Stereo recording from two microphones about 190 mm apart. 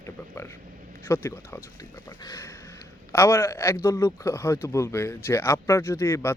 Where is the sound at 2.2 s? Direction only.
15° left (ahead or behind).